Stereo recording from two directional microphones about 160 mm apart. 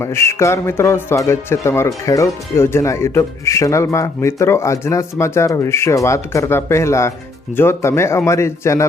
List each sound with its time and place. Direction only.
0.0 s speech: 15° left (ahead or behind)